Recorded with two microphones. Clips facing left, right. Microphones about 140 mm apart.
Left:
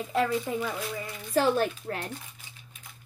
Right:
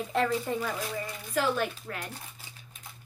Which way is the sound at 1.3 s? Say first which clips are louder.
Left 4 dB; 35° left (ahead or behind).